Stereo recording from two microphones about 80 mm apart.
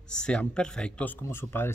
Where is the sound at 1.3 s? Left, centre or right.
Left.